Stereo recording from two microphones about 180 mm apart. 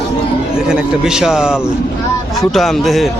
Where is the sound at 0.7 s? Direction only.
5° right (ahead or behind).